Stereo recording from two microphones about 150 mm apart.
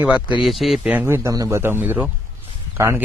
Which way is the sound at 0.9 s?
15° right (ahead or behind).